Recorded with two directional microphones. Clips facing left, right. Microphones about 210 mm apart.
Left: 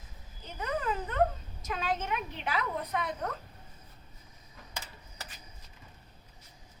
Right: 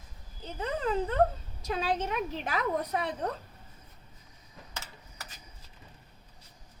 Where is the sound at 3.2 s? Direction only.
30° right (ahead or behind).